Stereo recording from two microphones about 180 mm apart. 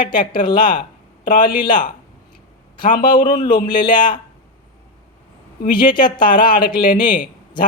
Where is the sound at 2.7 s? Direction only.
25° left (ahead or behind).